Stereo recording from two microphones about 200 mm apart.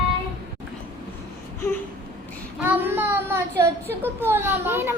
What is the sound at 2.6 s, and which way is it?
Child singing, 10° right (ahead or behind).